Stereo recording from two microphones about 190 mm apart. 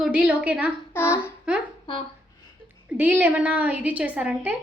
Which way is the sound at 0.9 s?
15° left (ahead or behind).